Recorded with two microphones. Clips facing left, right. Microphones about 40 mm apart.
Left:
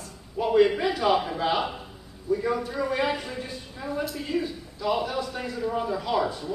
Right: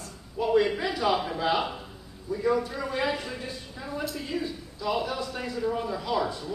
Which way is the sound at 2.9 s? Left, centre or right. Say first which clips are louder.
Left 2 dB; left.